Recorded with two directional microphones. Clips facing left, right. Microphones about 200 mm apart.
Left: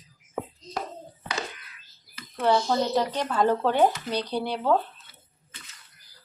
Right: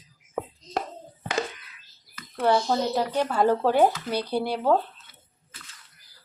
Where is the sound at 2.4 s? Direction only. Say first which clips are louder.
Even; 5° right (ahead or behind).